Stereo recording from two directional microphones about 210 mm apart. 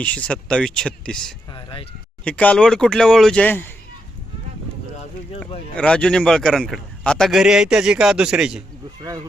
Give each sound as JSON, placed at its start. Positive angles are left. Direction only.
{"t": 0.0, "sound": "a man's voice", "side_deg": 5}
{"t": 1.5, "sound": "a sound", "side_deg": 25}
{"t": 2.2, "sound": "a man's voice", "side_deg": 5}
{"t": 5.7, "sound": "a man's voice", "side_deg": 5}